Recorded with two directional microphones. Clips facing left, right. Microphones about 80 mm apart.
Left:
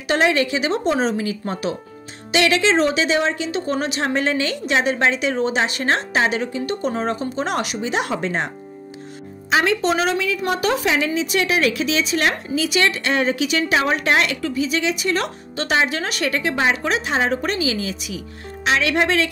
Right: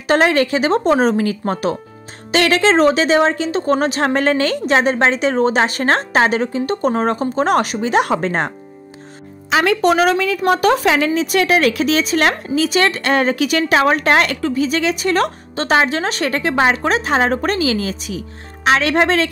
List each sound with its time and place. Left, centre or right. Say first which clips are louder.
0.1 s a woman's voice: right 4 dB; right
9.5 s a woman's voice: right 4 dB; right